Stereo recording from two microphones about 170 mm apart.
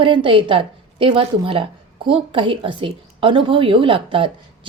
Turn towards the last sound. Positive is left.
turn(degrees=-30)  # may be behind; listen again after turning